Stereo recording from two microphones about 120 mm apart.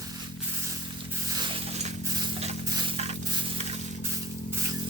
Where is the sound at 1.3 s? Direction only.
40° right (ahead or behind).